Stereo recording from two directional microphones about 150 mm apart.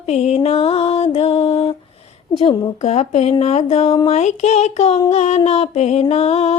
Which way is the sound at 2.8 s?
45° left (ahead or behind).